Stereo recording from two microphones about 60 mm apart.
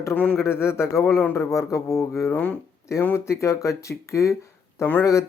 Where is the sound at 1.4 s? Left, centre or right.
Left.